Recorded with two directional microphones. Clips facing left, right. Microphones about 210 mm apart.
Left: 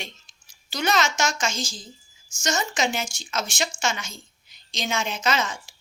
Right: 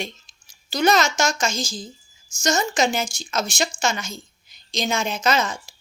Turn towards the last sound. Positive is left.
turn(degrees=-40)  # may be behind; listen again after turning